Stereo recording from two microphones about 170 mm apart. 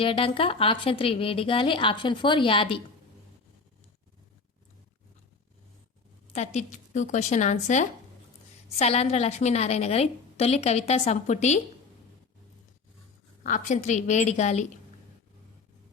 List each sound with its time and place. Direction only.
0.0 s speech: 30° left (ahead or behind)
6.3 s speech: 40° left (ahead or behind)
13.4 s speech: 45° left (ahead or behind)